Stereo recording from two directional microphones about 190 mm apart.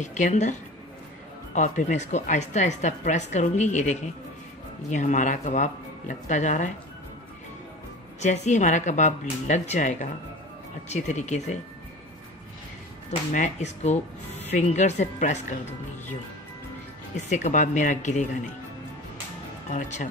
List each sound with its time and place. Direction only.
0.0 s speech: 40° left (ahead or behind)
8.2 s speech: 40° left (ahead or behind)
13.3 s speech: 40° left (ahead or behind)
17.3 s speech: 40° left (ahead or behind)
19.7 s speech: 40° left (ahead or behind)